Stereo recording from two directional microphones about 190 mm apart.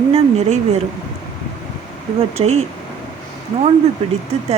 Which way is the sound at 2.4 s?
30° right (ahead or behind).